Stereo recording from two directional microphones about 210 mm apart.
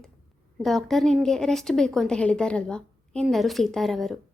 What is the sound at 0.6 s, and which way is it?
A woman's voice, centre (ahead or behind).